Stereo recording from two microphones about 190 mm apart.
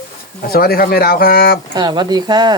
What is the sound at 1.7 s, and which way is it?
Speech, 25° right (ahead or behind).